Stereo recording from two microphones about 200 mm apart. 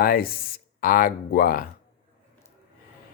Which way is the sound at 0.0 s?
45° left (ahead or behind).